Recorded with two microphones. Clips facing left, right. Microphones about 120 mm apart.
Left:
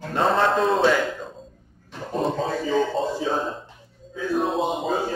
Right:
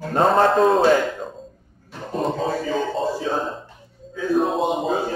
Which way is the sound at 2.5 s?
5° right (ahead or behind).